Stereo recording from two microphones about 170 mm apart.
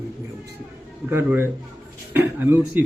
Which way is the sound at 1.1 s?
15° right (ahead or behind).